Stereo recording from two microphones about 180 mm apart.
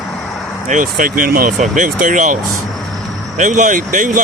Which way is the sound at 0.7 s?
50° right (ahead or behind).